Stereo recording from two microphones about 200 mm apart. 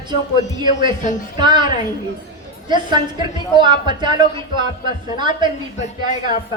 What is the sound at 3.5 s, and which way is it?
A man's voice, 25° right (ahead or behind).